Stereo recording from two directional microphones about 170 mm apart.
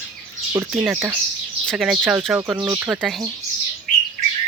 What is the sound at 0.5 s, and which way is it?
Speech, 10° right (ahead or behind).